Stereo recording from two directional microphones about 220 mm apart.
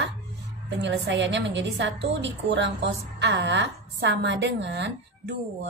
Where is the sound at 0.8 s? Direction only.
55° right (ahead or behind).